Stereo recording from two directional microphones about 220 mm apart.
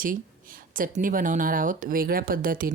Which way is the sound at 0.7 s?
40° right (ahead or behind).